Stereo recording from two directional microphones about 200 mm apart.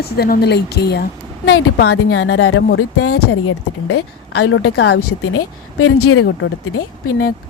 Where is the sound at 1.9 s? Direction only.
90° left.